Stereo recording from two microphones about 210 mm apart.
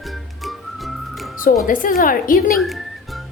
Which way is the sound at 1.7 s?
40° left (ahead or behind).